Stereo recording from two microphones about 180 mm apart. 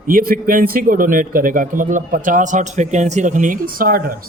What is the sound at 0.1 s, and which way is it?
Speech, 55° right (ahead or behind).